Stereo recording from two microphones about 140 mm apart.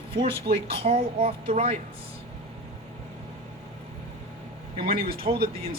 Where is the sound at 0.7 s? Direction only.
45° right (ahead or behind).